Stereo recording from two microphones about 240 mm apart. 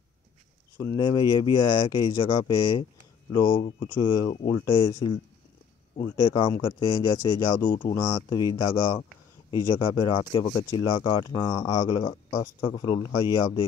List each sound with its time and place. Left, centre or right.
0.7 s speech: centre